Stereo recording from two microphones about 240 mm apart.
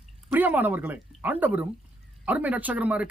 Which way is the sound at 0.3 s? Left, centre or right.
Centre.